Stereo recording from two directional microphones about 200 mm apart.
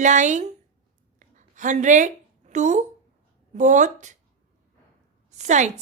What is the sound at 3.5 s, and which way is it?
Speech, 40° right (ahead or behind).